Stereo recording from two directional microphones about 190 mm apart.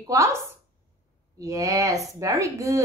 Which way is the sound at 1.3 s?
15° right (ahead or behind).